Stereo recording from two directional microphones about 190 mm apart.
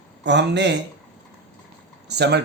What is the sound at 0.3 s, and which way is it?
Speech, 65° right (ahead or behind).